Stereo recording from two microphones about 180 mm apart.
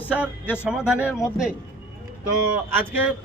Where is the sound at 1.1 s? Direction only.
15° left (ahead or behind).